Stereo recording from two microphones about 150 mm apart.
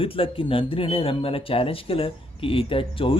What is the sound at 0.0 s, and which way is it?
Speech, 35° left (ahead or behind).